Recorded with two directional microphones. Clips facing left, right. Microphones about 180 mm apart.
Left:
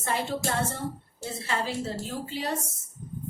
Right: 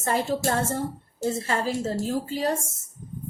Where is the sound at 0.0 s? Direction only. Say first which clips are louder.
Right 5 dB; 40° right (ahead or behind).